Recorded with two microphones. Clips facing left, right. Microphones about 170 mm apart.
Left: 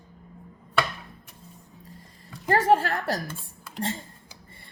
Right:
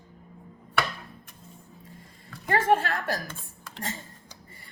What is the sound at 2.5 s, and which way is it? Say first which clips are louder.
Speech: left 2 dB; 35° left (ahead or behind).